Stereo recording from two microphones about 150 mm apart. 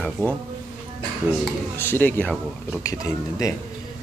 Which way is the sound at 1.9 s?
10° left (ahead or behind).